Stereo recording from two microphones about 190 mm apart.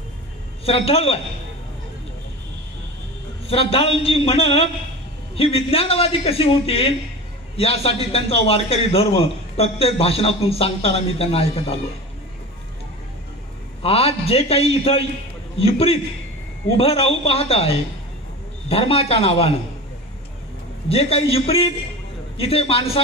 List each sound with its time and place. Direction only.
0.7 s a man's voice: 30° left (ahead or behind)
3.4 s a man's voice: 30° left (ahead or behind)
13.8 s a man's voice: 30° left (ahead or behind)
20.9 s a man's voice: 30° left (ahead or behind)